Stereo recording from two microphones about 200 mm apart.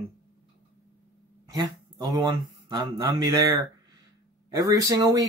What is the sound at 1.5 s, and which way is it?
Speech, 20° right (ahead or behind).